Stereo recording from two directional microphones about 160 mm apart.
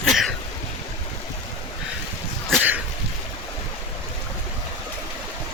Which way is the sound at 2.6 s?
10° right (ahead or behind).